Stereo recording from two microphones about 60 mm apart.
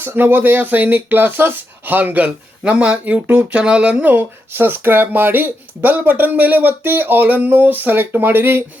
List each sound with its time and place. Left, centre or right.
0.0 s speech: right